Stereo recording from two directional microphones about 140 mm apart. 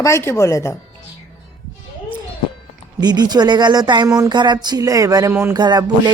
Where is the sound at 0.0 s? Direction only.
20° left (ahead or behind).